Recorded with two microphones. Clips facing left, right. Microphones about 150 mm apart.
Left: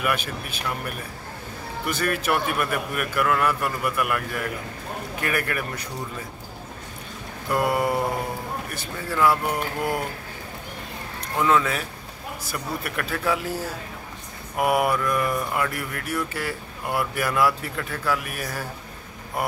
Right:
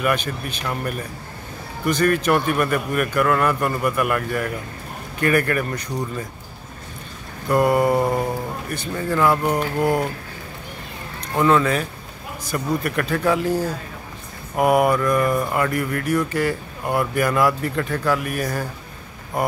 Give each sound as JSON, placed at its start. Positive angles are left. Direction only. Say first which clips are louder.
{"t": 0.0, "sound": "a man's voice", "louder": "right 4 dB", "side_deg": 5}
{"t": 7.4, "sound": "a man's voice", "louder": "right 6 dB", "side_deg": 0}
{"t": 9.4, "sound": "a sound", "louder": "right 6 dB", "side_deg": -40}
{"t": 11.3, "sound": "a man's voice", "louder": "right 4 dB", "side_deg": 0}